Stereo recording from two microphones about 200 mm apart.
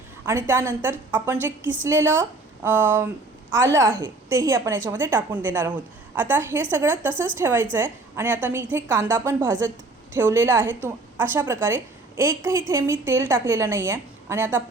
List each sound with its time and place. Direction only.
0.3 s a woman's voice: 10° right (ahead or behind)